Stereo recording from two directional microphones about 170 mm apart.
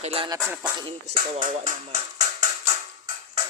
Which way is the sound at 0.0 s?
35° right (ahead or behind).